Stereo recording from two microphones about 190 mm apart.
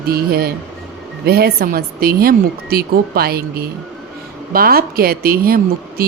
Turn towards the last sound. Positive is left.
turn(degrees=-50)  # may be behind; listen again after turning